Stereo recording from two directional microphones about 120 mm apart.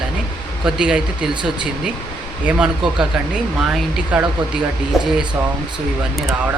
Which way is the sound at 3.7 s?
5° right (ahead or behind).